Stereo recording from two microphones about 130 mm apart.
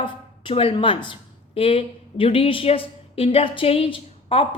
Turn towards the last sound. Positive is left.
turn(degrees=45)  # may be behind; listen again after turning